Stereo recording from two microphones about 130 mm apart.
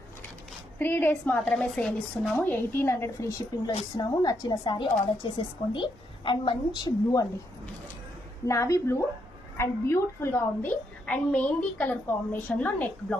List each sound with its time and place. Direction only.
0.8 s a woman's voice: 15° left (ahead or behind)
8.4 s a woman's voice: 25° left (ahead or behind)